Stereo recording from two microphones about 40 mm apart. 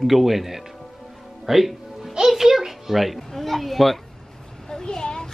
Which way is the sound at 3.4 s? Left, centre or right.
Centre.